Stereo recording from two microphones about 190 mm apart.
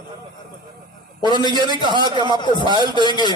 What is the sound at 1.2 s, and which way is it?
A man's voice, 25° left (ahead or behind).